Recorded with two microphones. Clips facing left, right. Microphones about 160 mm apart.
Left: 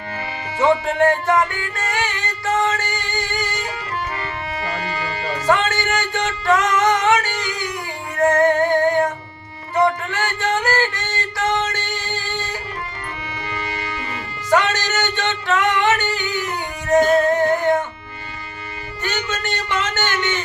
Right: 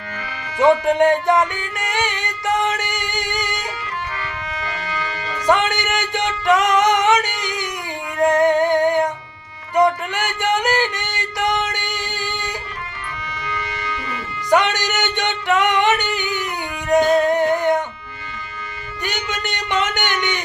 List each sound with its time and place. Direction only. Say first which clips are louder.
0.2 s music: left 3 dB; 30° left (ahead or behind)
0.6 s music: right 2 dB; 20° right (ahead or behind)
4.2 s music: left 2 dB; 35° left (ahead or behind)
5.5 s music: right 1 dB; 20° right (ahead or behind)
13.4 s music: even; 30° left (ahead or behind)
14.5 s singing: right 1 dB; 15° right (ahead or behind)
19.0 s a sound: left 1 dB; 15° right (ahead or behind)